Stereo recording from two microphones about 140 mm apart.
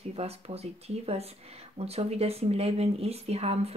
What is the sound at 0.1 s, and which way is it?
Speech, 45° right (ahead or behind).